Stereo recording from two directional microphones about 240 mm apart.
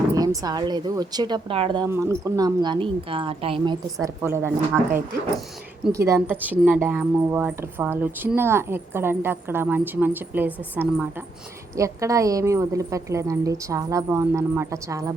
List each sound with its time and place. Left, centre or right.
0.1 s a woman's voice: centre
4.0 s a woman's voice: centre
5.9 s a woman's voice: centre